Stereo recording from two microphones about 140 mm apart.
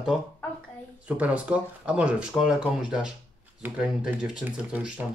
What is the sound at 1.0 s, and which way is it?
Speech, 10° right (ahead or behind).